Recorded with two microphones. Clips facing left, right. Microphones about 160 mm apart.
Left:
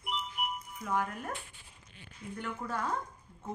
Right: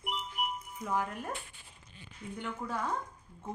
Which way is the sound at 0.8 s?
20° right (ahead or behind).